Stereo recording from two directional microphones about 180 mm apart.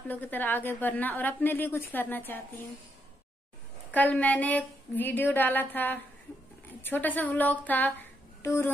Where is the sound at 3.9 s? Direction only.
10° left (ahead or behind).